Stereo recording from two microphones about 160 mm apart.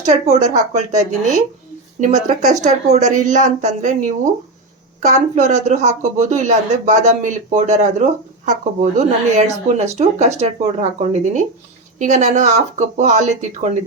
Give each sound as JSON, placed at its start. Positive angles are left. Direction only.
{"t": 0.0, "sound": "speech", "side_deg": -45}
{"t": 11.9, "sound": "speech", "side_deg": -50}